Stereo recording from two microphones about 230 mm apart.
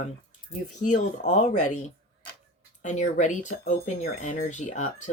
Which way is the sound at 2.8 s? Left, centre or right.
Left.